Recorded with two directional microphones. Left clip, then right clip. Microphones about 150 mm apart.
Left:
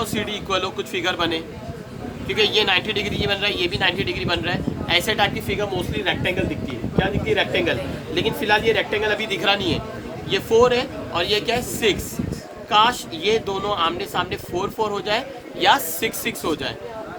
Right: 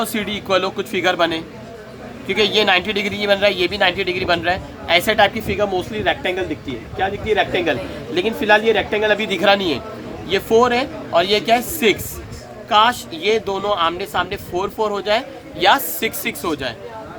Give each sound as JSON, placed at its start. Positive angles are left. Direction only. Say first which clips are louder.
{"t": 0.0, "sound": "a man's voice", "louder": "right 3 dB", "side_deg": -90}